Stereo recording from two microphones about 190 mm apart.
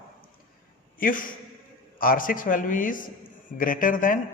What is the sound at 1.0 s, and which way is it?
A man's voice, 45° left (ahead or behind).